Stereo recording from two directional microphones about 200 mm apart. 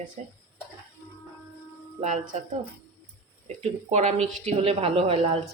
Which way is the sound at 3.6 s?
35° right (ahead or behind).